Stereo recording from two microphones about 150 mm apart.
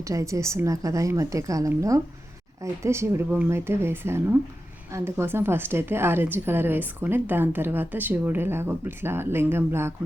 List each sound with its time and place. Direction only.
0.0 s a woman's voice: 20° right (ahead or behind)